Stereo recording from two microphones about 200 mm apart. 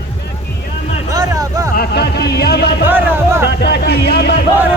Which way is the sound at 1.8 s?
55° left (ahead or behind).